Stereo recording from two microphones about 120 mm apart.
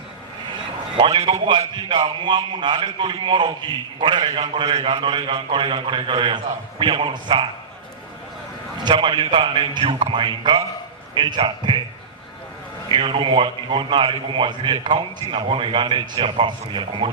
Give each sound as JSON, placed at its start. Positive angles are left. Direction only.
{"t": 0.9, "sound": "a man's voice", "side_deg": -45}
{"t": 8.8, "sound": "a man's voice", "side_deg": -40}
{"t": 12.9, "sound": "a man's voice", "side_deg": -45}